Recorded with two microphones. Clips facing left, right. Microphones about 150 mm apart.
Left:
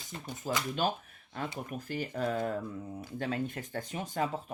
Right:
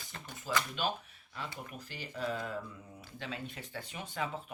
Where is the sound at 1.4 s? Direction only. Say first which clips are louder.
Left 6 dB; 50° left (ahead or behind).